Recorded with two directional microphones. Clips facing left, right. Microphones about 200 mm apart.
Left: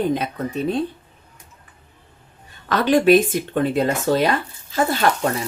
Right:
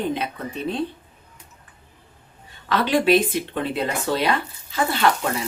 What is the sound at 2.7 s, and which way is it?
Speech, 45° left (ahead or behind).